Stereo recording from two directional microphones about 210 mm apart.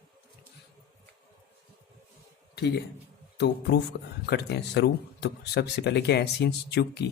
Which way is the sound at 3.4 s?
50° left (ahead or behind).